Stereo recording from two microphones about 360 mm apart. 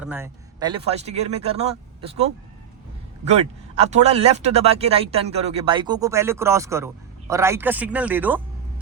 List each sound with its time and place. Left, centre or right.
0.0 s speech: centre
3.8 s speech: centre